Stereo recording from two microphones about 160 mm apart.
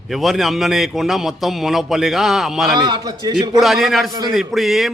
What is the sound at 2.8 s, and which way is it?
Speech, 25° right (ahead or behind).